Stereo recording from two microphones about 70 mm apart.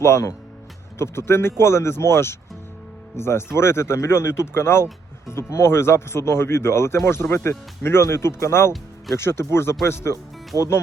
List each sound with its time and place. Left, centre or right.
0.0 s speech: left
10.5 s speech: right